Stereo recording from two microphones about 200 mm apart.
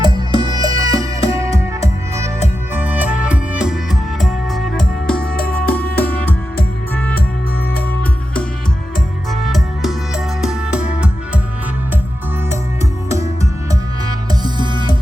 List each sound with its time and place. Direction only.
0.0 s music: 20° right (ahead or behind)
2.7 s music: 10° right (ahead or behind); by 6.3 s 10° left (ahead or behind)
9.3 s music: centre (ahead or behind)
13.1 s music: 15° right (ahead or behind)